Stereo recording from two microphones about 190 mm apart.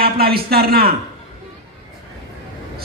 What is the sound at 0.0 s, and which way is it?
Speech, 55° right (ahead or behind).